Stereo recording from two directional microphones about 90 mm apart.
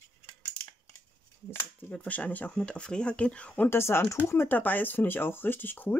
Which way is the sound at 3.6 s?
25° left (ahead or behind).